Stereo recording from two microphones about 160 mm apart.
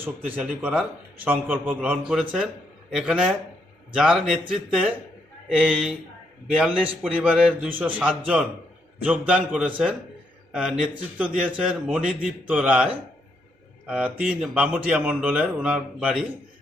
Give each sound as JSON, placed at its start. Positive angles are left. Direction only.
{"t": 0.3, "sound": "a man's voice", "side_deg": -10}